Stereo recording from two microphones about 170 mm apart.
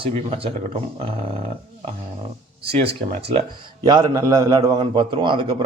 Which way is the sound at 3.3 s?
30° right (ahead or behind).